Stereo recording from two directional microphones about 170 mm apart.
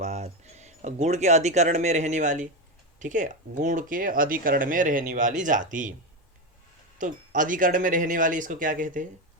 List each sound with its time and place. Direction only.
0.0 s speech: 40° right (ahead or behind)
7.0 s speech: 50° right (ahead or behind)